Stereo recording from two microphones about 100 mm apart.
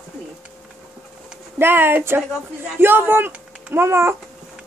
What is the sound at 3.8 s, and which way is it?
Speech, 25° right (ahead or behind).